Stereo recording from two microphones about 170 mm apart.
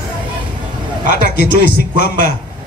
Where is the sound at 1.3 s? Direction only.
70° left (ahead or behind).